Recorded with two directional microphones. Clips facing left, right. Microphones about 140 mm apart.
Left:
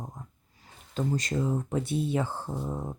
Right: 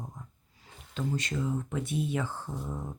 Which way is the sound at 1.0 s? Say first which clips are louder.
Left 3 dB; 35° left (ahead or behind).